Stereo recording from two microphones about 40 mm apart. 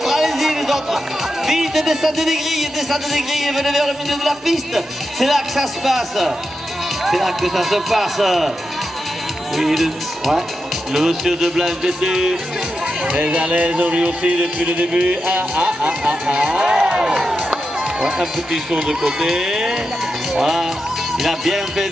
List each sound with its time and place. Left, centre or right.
0.0 s speech: centre
9.6 s speech: centre
13.0 s speech: right
16.6 s crowd: right
18.0 s speech: centre